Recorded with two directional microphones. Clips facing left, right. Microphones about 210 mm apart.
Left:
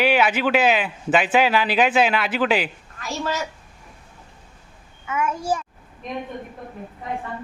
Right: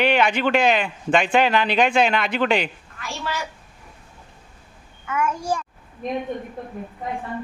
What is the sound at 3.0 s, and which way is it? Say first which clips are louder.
Speech: left 3 dB; 40° left (ahead or behind).